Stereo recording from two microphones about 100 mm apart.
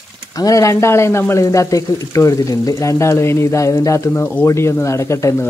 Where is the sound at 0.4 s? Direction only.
35° left (ahead or behind).